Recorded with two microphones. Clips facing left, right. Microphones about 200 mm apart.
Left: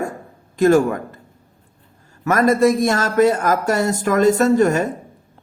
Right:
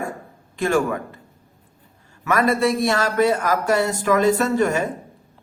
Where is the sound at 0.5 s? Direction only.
40° left (ahead or behind).